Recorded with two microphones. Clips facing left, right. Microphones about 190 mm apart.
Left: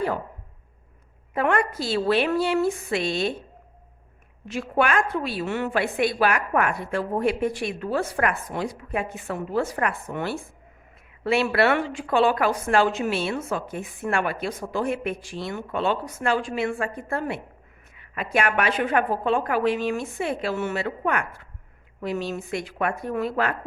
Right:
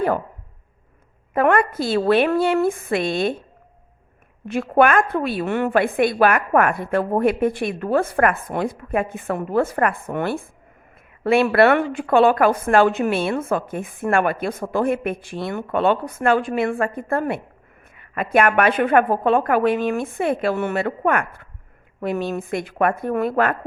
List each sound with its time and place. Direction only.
1.3 s a woman's voice: 55° right (ahead or behind)
4.4 s a woman's voice: 55° right (ahead or behind)